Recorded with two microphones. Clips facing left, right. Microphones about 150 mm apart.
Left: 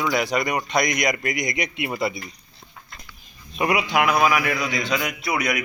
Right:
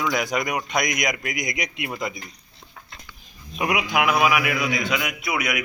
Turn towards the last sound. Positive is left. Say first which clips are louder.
# left 2 dB
turn(degrees=-5)  # may be behind; listen again after turning